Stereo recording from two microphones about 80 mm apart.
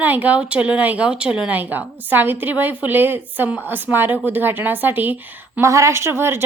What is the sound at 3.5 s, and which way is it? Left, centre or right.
A woman's voice, centre.